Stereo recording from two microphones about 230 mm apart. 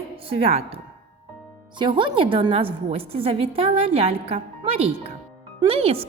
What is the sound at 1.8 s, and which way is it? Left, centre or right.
Speech, centre.